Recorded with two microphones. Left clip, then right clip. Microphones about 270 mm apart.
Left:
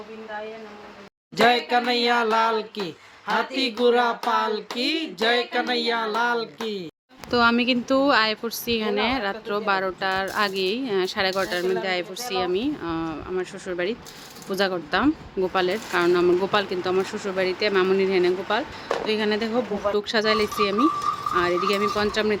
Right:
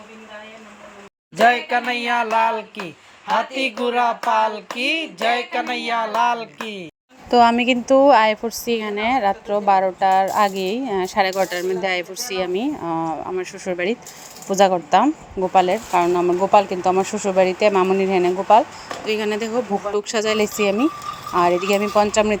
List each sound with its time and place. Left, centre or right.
1.5 s speech: centre
7.3 s speech: centre